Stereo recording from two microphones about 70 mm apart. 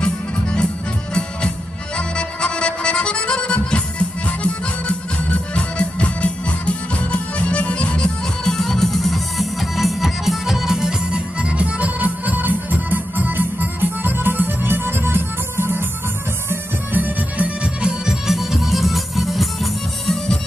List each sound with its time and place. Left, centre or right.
0.0 s accordion: centre
2.0 s music: centre; by 17.5 s right
17.8 s music: centre